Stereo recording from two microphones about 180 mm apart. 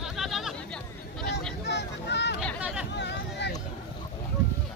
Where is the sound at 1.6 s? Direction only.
70° left (ahead or behind).